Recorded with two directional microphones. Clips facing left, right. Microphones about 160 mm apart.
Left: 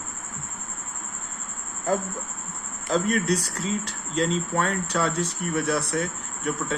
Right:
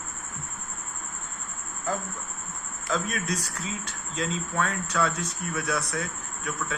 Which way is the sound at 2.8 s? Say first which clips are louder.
Left 6 dB; 35° left (ahead or behind).